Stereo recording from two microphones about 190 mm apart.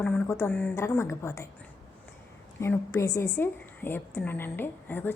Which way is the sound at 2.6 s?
15° left (ahead or behind).